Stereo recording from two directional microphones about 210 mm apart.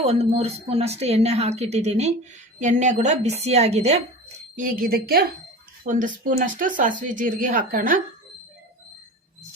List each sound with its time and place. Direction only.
0.0 s a woman's voice: 30° right (ahead or behind)
4.5 s speech: 40° right (ahead or behind)